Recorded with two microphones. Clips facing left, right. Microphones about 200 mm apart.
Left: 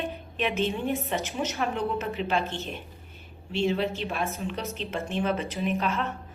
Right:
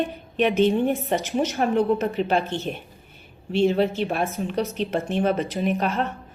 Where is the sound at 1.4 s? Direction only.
45° right (ahead or behind).